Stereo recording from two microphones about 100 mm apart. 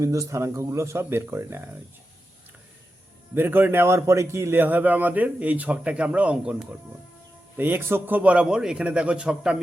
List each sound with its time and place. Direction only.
0.0 s speech: 30° right (ahead or behind)
3.3 s a man's voice: 20° right (ahead or behind)